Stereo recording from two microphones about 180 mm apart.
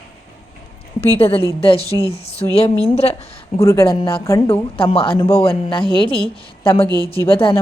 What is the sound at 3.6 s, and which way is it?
Speech, 15° left (ahead or behind).